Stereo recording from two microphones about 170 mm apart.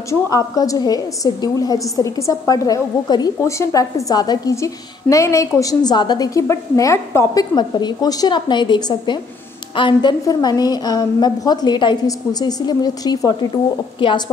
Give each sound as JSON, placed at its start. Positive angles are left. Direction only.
{"t": 0.1, "sound": "a woman's voice", "side_deg": 20}